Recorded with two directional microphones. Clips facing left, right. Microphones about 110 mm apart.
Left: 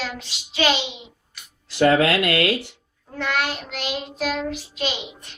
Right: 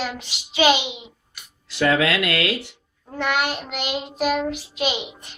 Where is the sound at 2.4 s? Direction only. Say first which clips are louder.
Left 3 dB; 45° left (ahead or behind).